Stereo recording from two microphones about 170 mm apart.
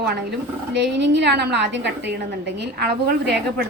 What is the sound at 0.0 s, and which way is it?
A woman's voice, 90° right.